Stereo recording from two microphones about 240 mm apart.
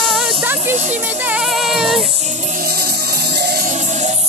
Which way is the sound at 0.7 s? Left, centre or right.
Right.